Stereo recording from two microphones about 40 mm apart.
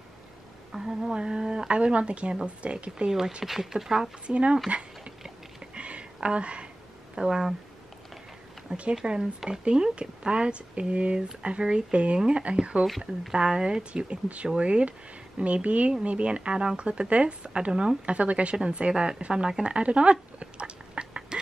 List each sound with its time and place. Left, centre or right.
0.7 s a sound: centre
1.1 s speech: right
3.1 s speech: centre
4.3 s speech: right
4.6 s a sound: right
7.2 s speech: centre
8.6 s speech: right
19.6 s duck: right